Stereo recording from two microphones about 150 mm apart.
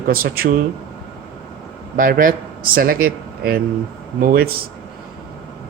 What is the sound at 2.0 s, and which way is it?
Speech, 65° right (ahead or behind).